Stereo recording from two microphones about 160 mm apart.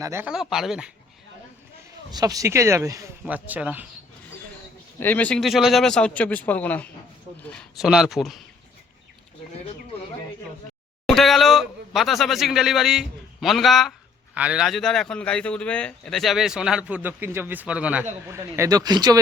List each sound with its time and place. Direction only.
0.0 s speech: 15° right (ahead or behind)
0.3 s a man's voice: 5° right (ahead or behind)
2.0 s speech: 25° right (ahead or behind)
3.2 s speech: 10° right (ahead or behind)
4.9 s speech: 10° left (ahead or behind)
7.5 s a man's voice: centre (ahead or behind)
11.1 s a man's voice: centre (ahead or behind); by 19.2 s 25° right (ahead or behind)